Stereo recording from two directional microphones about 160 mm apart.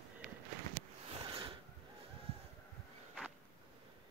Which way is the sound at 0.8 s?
40° right (ahead or behind).